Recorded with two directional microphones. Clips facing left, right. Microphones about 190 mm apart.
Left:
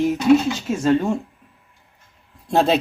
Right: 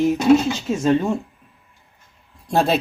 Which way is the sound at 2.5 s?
20° left (ahead or behind).